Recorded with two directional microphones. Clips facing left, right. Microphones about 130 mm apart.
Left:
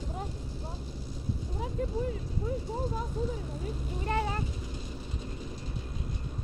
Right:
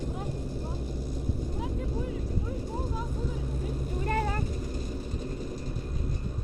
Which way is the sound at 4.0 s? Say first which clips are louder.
Right 1 dB; 45° right (ahead or behind).